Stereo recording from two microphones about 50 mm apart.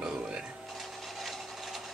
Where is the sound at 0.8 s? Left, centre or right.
Centre.